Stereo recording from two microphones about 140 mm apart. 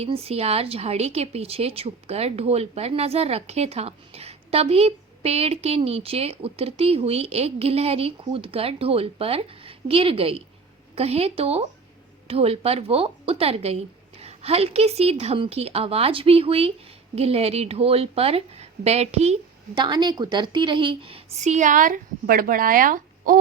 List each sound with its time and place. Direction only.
0.0 s speech: 45° right (ahead or behind)
19.7 s a woman's voice: 35° right (ahead or behind); by 23.4 s 80° right